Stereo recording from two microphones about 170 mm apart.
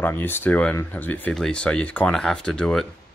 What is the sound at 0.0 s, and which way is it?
Speech, 10° left (ahead or behind).